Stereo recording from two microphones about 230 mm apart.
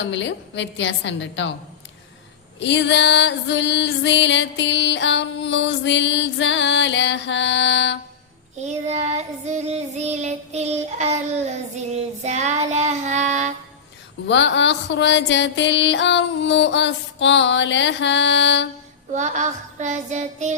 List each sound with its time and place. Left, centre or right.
0.0 s female singing: left
2.6 s female singing: left
8.6 s child singing: right
14.3 s female singing: left
19.1 s child singing: right